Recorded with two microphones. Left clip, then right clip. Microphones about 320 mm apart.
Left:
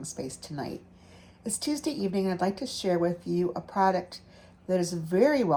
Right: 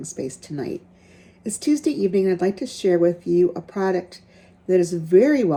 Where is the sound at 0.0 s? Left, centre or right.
Centre.